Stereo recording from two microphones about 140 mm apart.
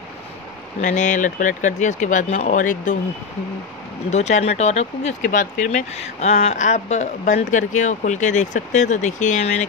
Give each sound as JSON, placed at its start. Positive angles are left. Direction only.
{"t": 0.7, "sound": "speech", "side_deg": 60}
{"t": 4.1, "sound": "speech", "side_deg": 55}
{"t": 5.2, "sound": "speech", "side_deg": 65}